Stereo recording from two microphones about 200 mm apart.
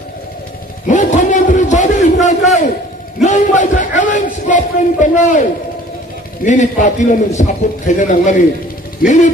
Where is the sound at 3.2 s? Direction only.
35° left (ahead or behind).